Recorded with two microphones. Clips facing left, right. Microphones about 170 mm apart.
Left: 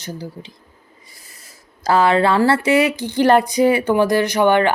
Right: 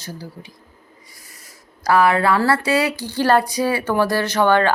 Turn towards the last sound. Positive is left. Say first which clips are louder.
# left 2 dB
turn(degrees=15)  # may be behind; listen again after turning